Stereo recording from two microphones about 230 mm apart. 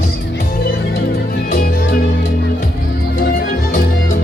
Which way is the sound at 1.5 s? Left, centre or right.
Left.